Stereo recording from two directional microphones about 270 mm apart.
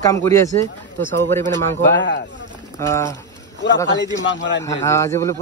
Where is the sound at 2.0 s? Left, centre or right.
Left.